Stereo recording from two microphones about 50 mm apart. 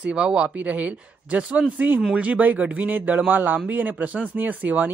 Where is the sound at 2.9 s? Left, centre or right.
Right.